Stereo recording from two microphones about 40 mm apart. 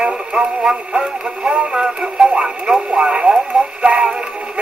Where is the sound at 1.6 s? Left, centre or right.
Right.